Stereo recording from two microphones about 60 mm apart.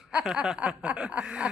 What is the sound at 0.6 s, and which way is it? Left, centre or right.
Chuckle, right.